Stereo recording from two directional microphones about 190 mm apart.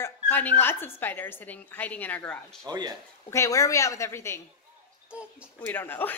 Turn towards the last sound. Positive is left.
turn(degrees=10)  # may be behind; listen again after turning